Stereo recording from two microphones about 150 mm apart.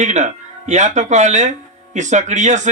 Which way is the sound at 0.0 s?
50° right (ahead or behind).